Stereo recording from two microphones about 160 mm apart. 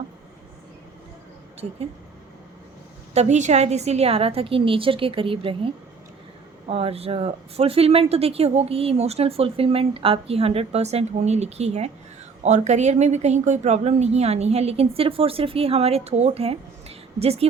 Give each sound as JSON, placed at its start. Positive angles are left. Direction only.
{"t": 3.2, "sound": "speech", "side_deg": -50}